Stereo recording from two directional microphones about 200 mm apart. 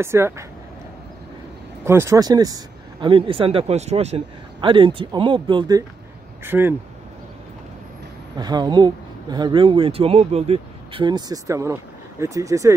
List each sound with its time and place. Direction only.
0.0 s speech: 10° right (ahead or behind)
1.9 s speech: 15° right (ahead or behind)
8.4 s speech: 20° right (ahead or behind)